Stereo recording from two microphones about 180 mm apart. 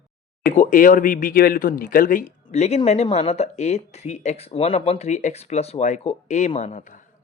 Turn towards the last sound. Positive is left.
turn(degrees=45)  # may be behind; listen again after turning